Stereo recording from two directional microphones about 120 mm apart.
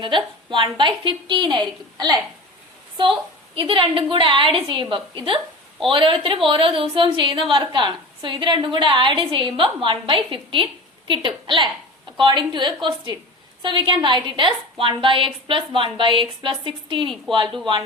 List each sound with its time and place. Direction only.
0.0 s a woman's voice: 45° right (ahead or behind)
3.5 s a woman's voice: 50° right (ahead or behind)